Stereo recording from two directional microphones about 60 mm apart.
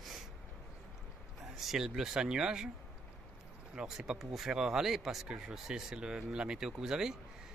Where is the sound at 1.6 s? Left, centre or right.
Centre.